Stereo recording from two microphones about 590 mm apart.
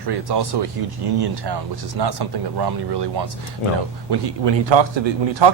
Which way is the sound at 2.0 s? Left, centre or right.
Right.